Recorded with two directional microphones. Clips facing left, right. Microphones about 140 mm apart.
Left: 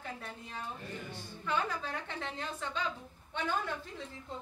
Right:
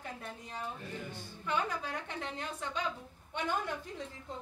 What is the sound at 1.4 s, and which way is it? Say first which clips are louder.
A woman's voice: even; 15° right (ahead or behind).